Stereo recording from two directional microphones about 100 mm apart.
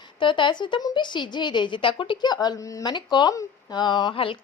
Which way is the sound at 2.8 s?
50° left (ahead or behind).